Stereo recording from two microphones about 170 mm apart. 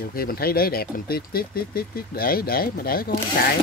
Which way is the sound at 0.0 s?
60° left (ahead or behind).